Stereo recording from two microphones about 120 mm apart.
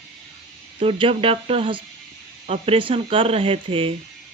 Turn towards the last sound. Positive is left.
turn(degrees=-50)  # may be behind; listen again after turning